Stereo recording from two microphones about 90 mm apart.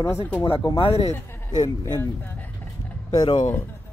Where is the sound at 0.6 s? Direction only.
50° left (ahead or behind).